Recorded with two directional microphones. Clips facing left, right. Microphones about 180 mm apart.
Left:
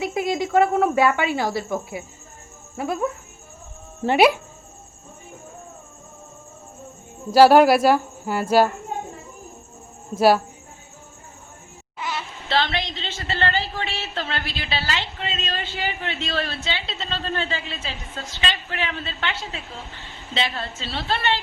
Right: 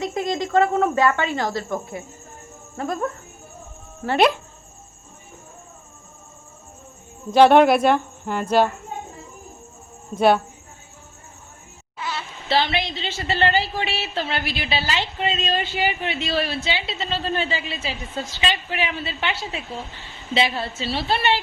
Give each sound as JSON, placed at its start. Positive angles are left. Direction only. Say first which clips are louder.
{"t": 0.0, "sound": "speech", "louder": "left 1 dB", "side_deg": 5}
{"t": 4.0, "sound": "speech", "louder": "left 3 dB", "side_deg": 30}
{"t": 7.3, "sound": "speech", "louder": "even", "side_deg": 5}
{"t": 10.2, "sound": "speech", "louder": "even", "side_deg": 5}
{"t": 11.9, "sound": "a sound", "louder": "left 1 dB", "side_deg": 15}
{"t": 12.5, "sound": "a woman's voice", "louder": "right 2 dB", "side_deg": -5}